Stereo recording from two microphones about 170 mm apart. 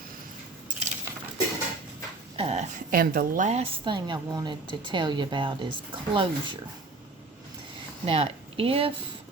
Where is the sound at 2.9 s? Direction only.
55° right (ahead or behind); by 6.5 s 30° right (ahead or behind).